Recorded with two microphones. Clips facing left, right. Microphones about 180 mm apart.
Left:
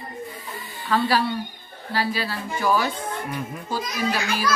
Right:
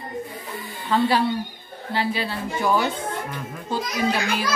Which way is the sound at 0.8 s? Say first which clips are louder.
Right 2 dB; 20° right (ahead or behind).